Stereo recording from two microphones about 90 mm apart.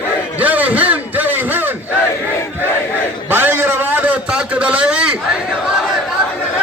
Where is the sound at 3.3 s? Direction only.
25° right (ahead or behind).